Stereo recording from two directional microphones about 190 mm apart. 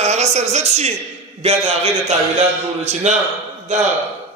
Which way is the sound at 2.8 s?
35° right (ahead or behind).